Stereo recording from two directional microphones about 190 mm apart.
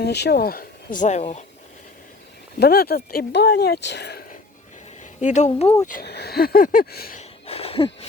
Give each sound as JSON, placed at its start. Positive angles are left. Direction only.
{"t": 0.0, "sound": "speech", "side_deg": 60}
{"t": 2.6, "sound": "speech", "side_deg": 55}
{"t": 5.2, "sound": "speech", "side_deg": 40}
{"t": 5.6, "sound": "speech", "side_deg": 15}
{"t": 5.9, "sound": "speech", "side_deg": 55}
{"t": 7.2, "sound": "a sound", "side_deg": 30}